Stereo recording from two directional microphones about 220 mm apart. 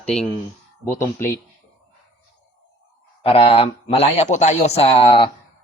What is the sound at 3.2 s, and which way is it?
Speech, 25° left (ahead or behind).